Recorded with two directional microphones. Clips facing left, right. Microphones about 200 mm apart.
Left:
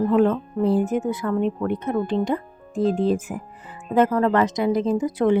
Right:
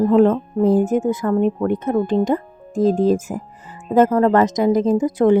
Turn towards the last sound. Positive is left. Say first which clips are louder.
# right 5 dB
turn(degrees=-45)  # may be behind; listen again after turning